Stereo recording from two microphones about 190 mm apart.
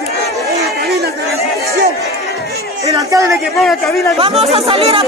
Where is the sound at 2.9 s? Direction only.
20° right (ahead or behind).